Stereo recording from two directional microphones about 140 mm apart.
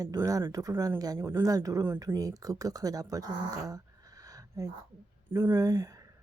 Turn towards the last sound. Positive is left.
turn(degrees=-20)  # may be behind; listen again after turning